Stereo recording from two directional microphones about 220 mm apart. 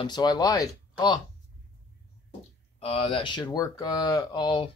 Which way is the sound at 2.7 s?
25° left (ahead or behind).